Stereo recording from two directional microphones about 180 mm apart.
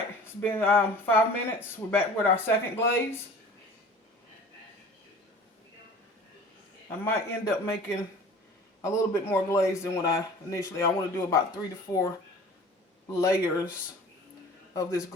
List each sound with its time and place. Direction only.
0.4 s a man's voice: 10° left (ahead or behind)
7.0 s a man's voice: 15° left (ahead or behind)
13.1 s a man's voice: 15° left (ahead or behind)
14.7 s a man's voice: 20° left (ahead or behind)